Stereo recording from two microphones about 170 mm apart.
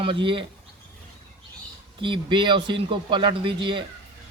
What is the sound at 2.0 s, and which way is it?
A man's voice, 30° right (ahead or behind).